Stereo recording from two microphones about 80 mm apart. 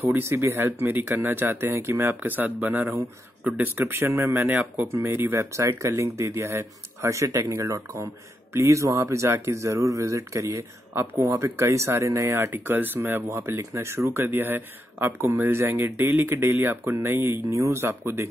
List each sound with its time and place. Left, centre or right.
0.0 s speech: right